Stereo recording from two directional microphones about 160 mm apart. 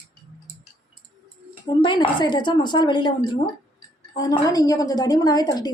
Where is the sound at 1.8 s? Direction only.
30° left (ahead or behind).